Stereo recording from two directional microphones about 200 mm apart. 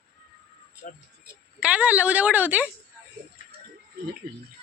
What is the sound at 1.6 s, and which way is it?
A woman's voice, 5° right (ahead or behind).